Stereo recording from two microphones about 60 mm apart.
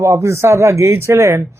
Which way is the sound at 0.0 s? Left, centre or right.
Right.